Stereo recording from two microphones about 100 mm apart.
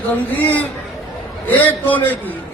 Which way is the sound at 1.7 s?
15° left (ahead or behind).